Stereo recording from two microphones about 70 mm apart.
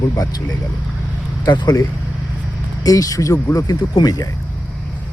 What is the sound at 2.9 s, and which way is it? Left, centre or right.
Speech, left.